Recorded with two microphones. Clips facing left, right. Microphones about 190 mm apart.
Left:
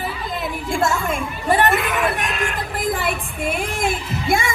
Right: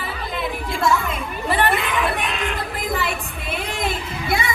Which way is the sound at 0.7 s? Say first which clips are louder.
Left 1 dB; 50° left (ahead or behind).